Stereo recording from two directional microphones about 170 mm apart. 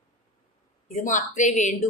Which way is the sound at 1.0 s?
45° left (ahead or behind).